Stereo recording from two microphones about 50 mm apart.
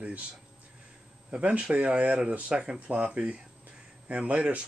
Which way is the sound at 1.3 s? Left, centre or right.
Right.